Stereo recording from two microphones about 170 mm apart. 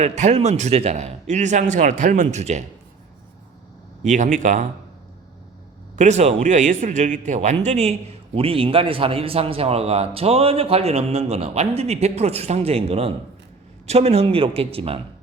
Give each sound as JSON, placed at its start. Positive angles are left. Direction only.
{"t": 0.0, "sound": "a man's voice", "side_deg": -40}
{"t": 4.0, "sound": "a man's voice", "side_deg": -45}
{"t": 6.0, "sound": "a man's voice", "side_deg": -40}